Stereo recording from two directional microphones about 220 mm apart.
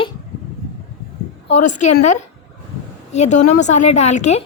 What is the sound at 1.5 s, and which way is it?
Speech, 35° left (ahead or behind).